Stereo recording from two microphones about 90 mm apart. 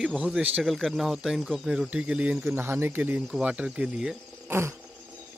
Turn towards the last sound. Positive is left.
turn(degrees=-30)  # may be behind; listen again after turning